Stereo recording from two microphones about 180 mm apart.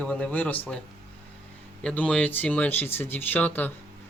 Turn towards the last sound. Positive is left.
turn(degrees=10)  # may be behind; listen again after turning